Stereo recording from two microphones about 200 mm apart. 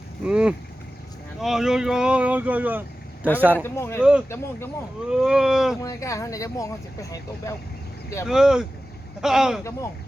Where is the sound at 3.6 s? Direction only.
10° left (ahead or behind).